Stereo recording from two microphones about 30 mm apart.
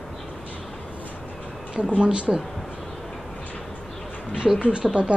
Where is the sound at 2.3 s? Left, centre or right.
Centre.